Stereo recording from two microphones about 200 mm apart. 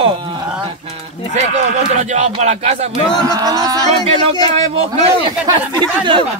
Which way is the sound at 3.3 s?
20° right (ahead or behind).